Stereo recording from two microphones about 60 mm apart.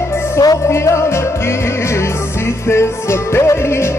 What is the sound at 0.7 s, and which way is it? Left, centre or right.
Music, left.